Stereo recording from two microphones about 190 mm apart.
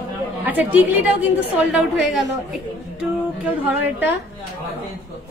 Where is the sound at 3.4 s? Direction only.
10° right (ahead or behind).